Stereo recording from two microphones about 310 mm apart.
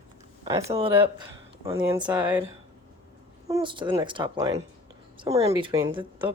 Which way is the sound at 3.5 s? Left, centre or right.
Centre.